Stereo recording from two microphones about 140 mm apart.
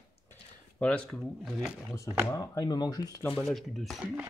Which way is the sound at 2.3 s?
25° left (ahead or behind).